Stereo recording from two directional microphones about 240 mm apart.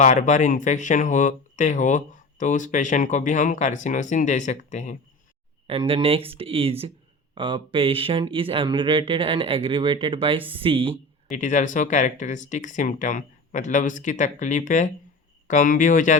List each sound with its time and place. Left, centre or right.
0.0 s speech: left
5.6 s speech: right
11.3 s speech: left